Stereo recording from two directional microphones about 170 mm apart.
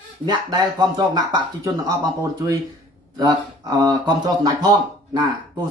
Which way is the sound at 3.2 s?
20° right (ahead or behind).